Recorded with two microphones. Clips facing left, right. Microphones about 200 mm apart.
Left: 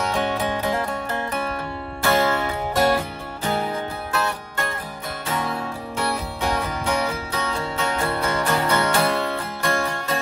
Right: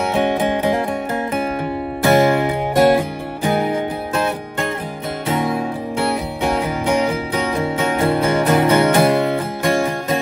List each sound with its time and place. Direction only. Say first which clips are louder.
0.1 s music: right 6 dB; 15° right (ahead or behind)